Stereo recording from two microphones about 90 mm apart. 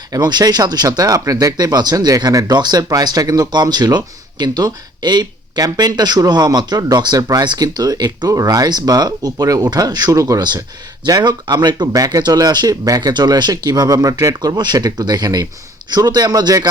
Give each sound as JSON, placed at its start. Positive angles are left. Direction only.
{"t": 0.1, "sound": "speech", "side_deg": -50}
{"t": 11.0, "sound": "speech", "side_deg": -50}